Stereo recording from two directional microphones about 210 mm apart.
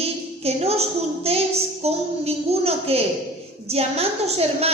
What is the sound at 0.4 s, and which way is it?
A woman's voice, 30° right (ahead or behind).